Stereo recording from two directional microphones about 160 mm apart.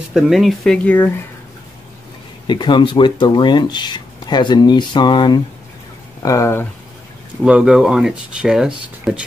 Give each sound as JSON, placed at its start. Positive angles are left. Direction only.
{"t": 0.1, "sound": "speech", "side_deg": 0}
{"t": 2.4, "sound": "speech", "side_deg": 30}
{"t": 7.4, "sound": "speech", "side_deg": -5}